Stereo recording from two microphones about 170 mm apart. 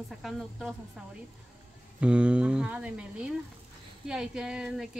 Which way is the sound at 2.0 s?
5° right (ahead or behind).